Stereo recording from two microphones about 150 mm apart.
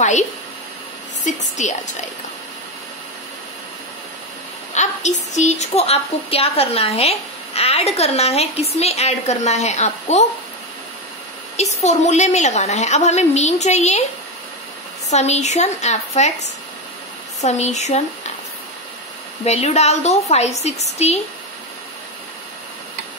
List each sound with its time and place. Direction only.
1.2 s a sound: 55° left (ahead or behind)
4.7 s a woman's voice: 50° left (ahead or behind)
11.8 s a woman's voice: 50° left (ahead or behind)
15.0 s a woman's voice: 50° left (ahead or behind)
19.4 s a woman's voice: 45° left (ahead or behind)